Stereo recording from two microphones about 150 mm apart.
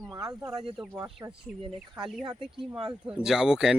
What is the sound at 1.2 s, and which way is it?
Speech, 25° right (ahead or behind).